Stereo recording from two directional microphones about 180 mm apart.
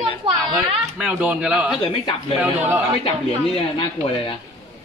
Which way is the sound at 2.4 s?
10° right (ahead or behind).